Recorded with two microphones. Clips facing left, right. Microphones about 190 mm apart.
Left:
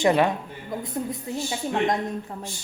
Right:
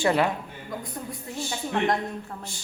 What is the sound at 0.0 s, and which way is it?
Speech, 20° left (ahead or behind).